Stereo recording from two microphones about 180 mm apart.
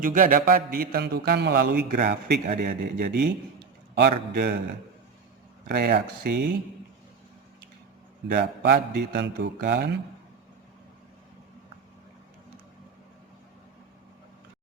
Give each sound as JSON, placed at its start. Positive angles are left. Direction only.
{"t": 0.0, "sound": "a man's voice", "side_deg": -50}
{"t": 5.7, "sound": "a man's voice", "side_deg": -60}
{"t": 8.3, "sound": "a man's voice", "side_deg": -65}